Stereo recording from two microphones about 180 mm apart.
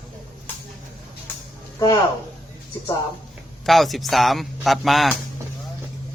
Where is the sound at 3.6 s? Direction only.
Centre (ahead or behind).